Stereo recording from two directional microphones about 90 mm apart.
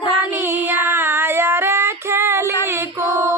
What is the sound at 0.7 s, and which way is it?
Female singing, 25° right (ahead or behind).